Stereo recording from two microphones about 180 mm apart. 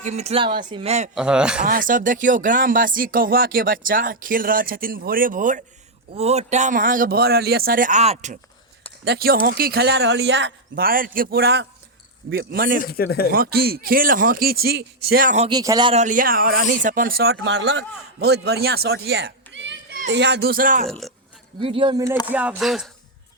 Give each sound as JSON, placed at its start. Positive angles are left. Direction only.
{"t": 0.0, "sound": "speech", "side_deg": -40}
{"t": 1.1, "sound": "speech", "side_deg": -5}
{"t": 1.6, "sound": "speech", "side_deg": -50}
{"t": 6.1, "sound": "speech", "side_deg": -35}
{"t": 9.0, "sound": "a man's voice", "side_deg": -55}
{"t": 10.8, "sound": "a man's voice", "side_deg": -50}
{"t": 12.8, "sound": "speech", "side_deg": 60}
{"t": 13.3, "sound": "a man's voice", "side_deg": -55}
{"t": 15.4, "sound": "speech", "side_deg": -20}
{"t": 16.0, "sound": "a man's voice", "side_deg": -45}
{"t": 18.2, "sound": "a child's voice", "side_deg": -65}
{"t": 20.1, "sound": "a man's voice", "side_deg": -70}
{"t": 21.6, "sound": "speech", "side_deg": -30}
{"t": 22.3, "sound": "speech", "side_deg": -10}